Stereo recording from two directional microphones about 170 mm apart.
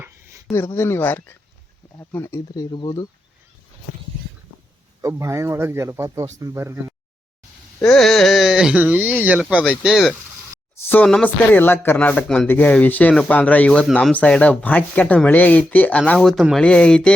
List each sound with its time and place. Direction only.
0.0 s a sound: 15° right (ahead or behind)
0.5 s speech: 15° left (ahead or behind)
5.0 s speech: 15° right (ahead or behind)
7.8 s speech: 5° left (ahead or behind)
10.8 s speech: 5° left (ahead or behind)